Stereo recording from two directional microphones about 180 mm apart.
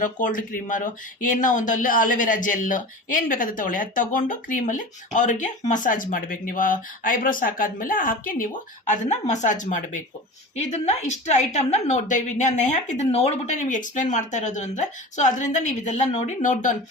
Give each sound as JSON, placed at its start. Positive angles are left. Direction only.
{"t": 0.0, "sound": "a woman's voice", "side_deg": 50}